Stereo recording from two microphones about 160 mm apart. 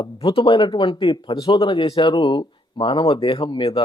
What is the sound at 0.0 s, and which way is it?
Speech, 35° left (ahead or behind).